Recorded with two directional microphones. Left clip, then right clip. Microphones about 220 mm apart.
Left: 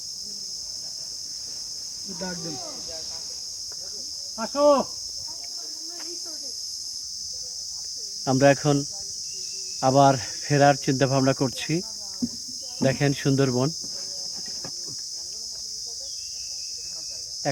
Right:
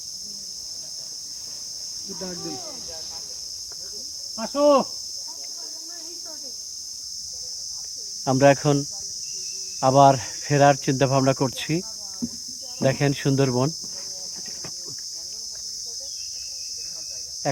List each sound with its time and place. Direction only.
4.4 s insect: 55° right (ahead or behind)
8.3 s speech: 10° right (ahead or behind)
9.8 s speech: 10° right (ahead or behind)
12.8 s speech: 10° right (ahead or behind)